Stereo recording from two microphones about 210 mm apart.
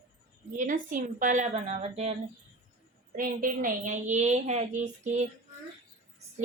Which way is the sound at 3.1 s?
40° right (ahead or behind).